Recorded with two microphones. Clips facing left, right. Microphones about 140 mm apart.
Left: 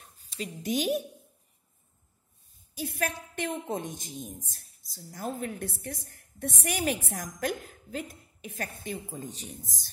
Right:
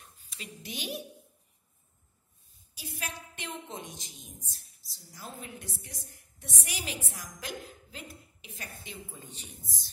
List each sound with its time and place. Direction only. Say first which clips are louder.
0.0 s a woman's voice: left 10 dB; 40° left (ahead or behind)
2.7 s a woman's voice: left 9 dB; 55° left (ahead or behind); by 9.8 s 40° left (ahead or behind)